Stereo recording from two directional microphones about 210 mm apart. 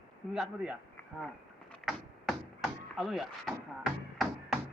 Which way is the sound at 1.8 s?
Centre (ahead or behind).